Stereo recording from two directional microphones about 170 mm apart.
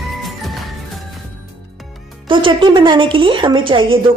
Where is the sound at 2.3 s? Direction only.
30° right (ahead or behind).